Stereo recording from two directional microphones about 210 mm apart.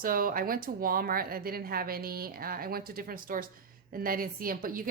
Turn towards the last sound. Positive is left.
turn(degrees=-40)  # may be behind; listen again after turning